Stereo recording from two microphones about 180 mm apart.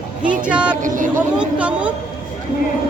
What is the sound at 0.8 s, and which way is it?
Speech, 45° right (ahead or behind).